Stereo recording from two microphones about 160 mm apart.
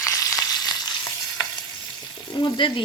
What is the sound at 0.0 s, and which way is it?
Frying, 20° left (ahead or behind).